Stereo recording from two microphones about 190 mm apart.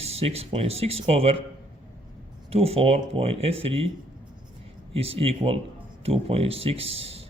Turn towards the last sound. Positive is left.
turn(degrees=-30)  # may be behind; listen again after turning